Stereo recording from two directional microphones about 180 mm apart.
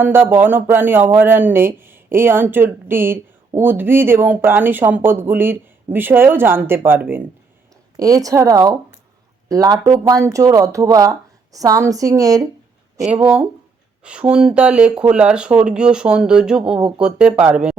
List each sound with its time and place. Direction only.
0.0 s speech: 10° right (ahead or behind)
13.2 s speech: 5° right (ahead or behind)